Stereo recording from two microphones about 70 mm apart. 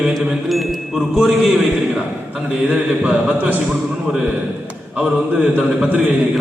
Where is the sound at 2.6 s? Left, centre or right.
Centre.